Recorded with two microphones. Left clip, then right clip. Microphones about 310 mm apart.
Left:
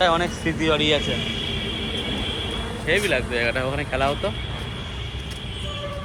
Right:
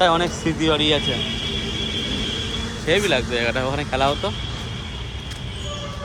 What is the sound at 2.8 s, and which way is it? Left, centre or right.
Speech, centre.